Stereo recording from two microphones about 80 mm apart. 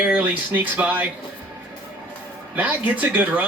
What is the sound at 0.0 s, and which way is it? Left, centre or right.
Speech, centre.